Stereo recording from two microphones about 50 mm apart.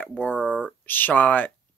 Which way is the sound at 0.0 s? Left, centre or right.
Left.